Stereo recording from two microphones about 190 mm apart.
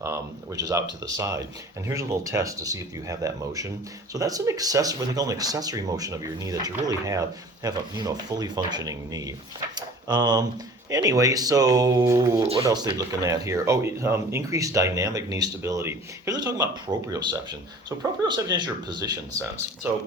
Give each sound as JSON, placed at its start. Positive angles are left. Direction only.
{"t": 0.0, "sound": "speech", "side_deg": -15}
{"t": 19.9, "sound": "speech", "side_deg": -10}